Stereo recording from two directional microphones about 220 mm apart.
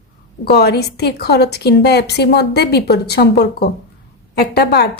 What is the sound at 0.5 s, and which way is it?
A woman's voice, 45° left (ahead or behind).